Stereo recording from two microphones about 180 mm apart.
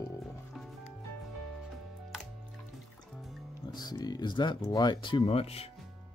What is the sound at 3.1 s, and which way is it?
Music, centre (ahead or behind).